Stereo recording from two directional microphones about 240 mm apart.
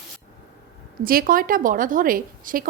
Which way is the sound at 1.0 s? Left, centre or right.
Right.